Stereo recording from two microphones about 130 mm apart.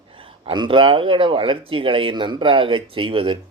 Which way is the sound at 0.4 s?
40° right (ahead or behind).